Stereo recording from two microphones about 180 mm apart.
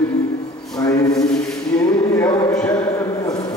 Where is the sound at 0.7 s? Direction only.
20° left (ahead or behind).